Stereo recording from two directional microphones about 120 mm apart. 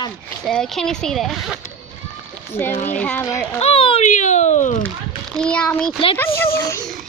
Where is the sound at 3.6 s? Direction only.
50° left (ahead or behind).